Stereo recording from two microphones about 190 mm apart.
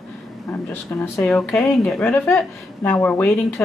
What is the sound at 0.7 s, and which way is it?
A woman's voice, 10° left (ahead or behind).